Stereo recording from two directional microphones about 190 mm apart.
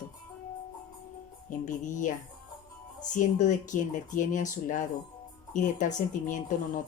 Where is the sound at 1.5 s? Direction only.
40° left (ahead or behind).